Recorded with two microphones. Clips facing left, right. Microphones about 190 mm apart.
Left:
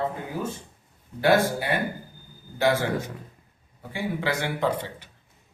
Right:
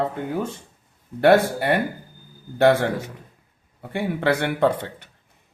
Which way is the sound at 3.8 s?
60° right (ahead or behind).